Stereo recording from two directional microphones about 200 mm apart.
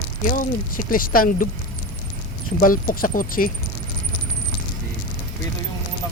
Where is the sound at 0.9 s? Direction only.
45° left (ahead or behind).